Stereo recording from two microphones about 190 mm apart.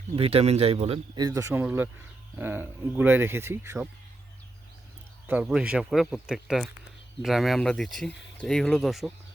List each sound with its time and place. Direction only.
0.2 s speech: 30° right (ahead or behind); by 3.8 s 15° right (ahead or behind)
5.2 s speech: 5° right (ahead or behind)